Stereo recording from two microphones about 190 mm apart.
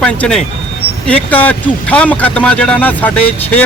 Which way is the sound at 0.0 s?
5° left (ahead or behind).